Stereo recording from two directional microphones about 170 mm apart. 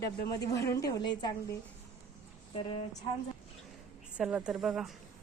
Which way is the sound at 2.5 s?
35° left (ahead or behind).